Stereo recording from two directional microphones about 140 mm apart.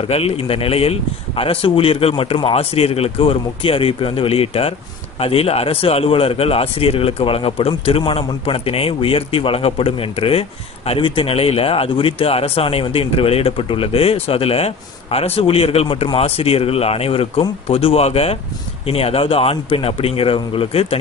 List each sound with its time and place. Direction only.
0.1 s a man's voice: 45° left (ahead or behind)